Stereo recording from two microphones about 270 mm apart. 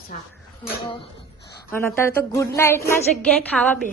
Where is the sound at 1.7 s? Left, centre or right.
Centre.